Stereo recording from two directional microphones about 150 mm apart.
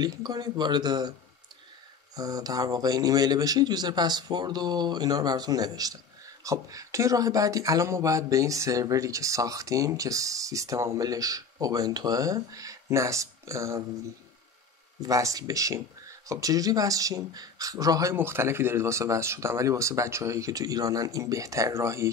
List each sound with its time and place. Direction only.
0.0 s speech: 30° right (ahead or behind)
2.1 s speech: 25° right (ahead or behind)
15.0 s speech: 20° right (ahead or behind)